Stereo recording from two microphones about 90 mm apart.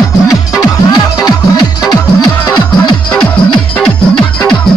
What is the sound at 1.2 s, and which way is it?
Music, 45° left (ahead or behind).